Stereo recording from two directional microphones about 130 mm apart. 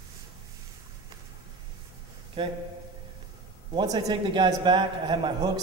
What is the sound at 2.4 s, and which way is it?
Speech, 40° right (ahead or behind).